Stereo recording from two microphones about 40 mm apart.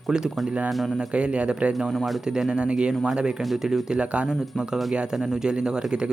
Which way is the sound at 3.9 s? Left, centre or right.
Right.